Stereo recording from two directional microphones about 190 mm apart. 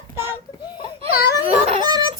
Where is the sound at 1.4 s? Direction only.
30° right (ahead or behind).